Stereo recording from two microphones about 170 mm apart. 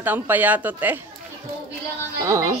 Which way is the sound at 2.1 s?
15° right (ahead or behind).